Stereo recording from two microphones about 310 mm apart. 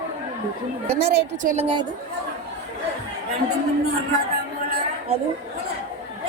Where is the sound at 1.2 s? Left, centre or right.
Right.